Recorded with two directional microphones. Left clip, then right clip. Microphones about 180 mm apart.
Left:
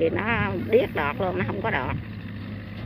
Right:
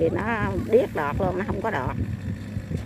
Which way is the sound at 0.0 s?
20° right (ahead or behind).